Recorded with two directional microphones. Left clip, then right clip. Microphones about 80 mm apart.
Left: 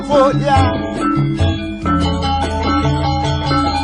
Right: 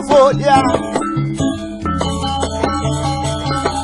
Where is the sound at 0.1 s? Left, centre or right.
Left.